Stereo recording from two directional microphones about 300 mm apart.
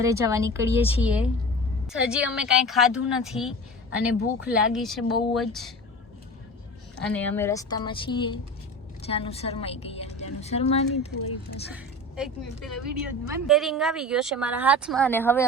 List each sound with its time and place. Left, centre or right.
0.0 s a woman's voice: centre
7.0 s a woman's voice: centre
11.7 s a woman's voice: centre